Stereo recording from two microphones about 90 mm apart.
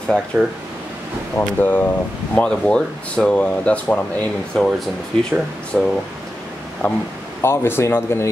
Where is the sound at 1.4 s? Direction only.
20° left (ahead or behind).